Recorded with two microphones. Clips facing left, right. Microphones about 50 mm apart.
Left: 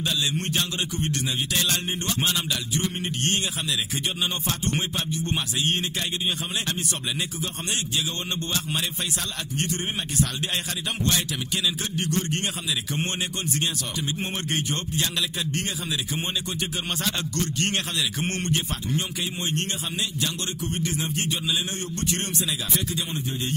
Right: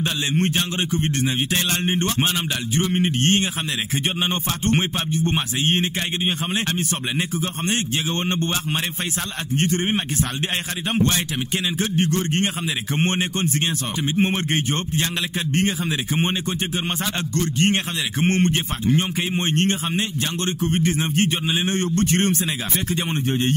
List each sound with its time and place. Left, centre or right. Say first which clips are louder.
0.0 s a man's voice: right 5 dB; right
11.0 s a man's voice: right 6 dB; right
17.3 s a man's voice: right 6 dB; right